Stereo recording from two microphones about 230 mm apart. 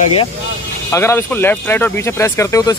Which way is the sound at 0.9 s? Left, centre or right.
Centre.